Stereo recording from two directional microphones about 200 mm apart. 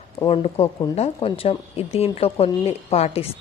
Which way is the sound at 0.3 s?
30° left (ahead or behind).